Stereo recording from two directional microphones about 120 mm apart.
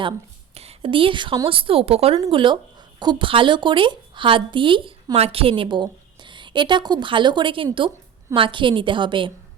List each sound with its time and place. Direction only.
0.5 s a woman's voice: 60° right (ahead or behind)
2.1 s a woman's voice: 40° right (ahead or behind)